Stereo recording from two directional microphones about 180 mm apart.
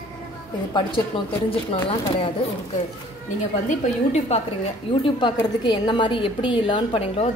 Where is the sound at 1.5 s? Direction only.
30° left (ahead or behind).